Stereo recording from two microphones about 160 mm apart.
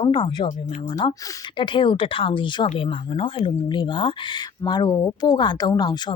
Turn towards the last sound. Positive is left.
turn(degrees=25)  # may be behind; listen again after turning